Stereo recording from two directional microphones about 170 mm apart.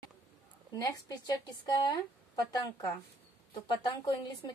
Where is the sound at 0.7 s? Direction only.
20° left (ahead or behind).